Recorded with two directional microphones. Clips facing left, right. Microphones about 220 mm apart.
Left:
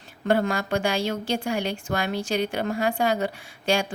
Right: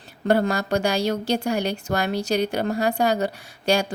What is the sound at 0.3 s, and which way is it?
A woman's voice, 40° right (ahead or behind).